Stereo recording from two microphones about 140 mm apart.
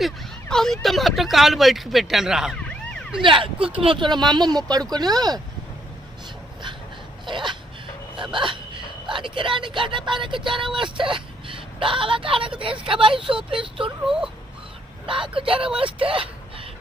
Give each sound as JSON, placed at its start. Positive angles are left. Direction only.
{"t": 0.0, "sound": "speech", "side_deg": 5}
{"t": 2.6, "sound": "emergency vehicle", "side_deg": 10}
{"t": 3.2, "sound": "speech", "side_deg": -40}
{"t": 7.3, "sound": "speech", "side_deg": -35}
{"t": 14.0, "sound": "speech", "side_deg": -5}
{"t": 15.3, "sound": "speech", "side_deg": -40}